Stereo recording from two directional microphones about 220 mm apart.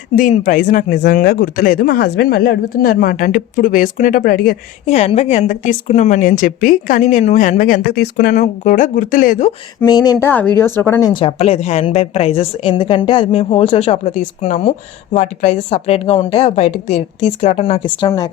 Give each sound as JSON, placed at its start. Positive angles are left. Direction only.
{"t": 0.2, "sound": "speech", "side_deg": 35}
{"t": 9.8, "sound": "speech", "side_deg": 15}
{"t": 11.1, "sound": "a woman's voice", "side_deg": 25}